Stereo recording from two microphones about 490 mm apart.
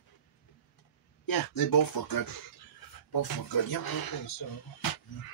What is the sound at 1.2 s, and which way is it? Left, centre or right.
Speech, left.